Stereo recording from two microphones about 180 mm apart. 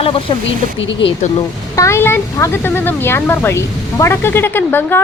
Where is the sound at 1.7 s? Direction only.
15° left (ahead or behind).